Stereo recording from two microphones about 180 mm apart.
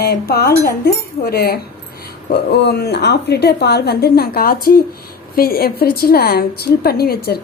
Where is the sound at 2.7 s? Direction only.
65° left (ahead or behind).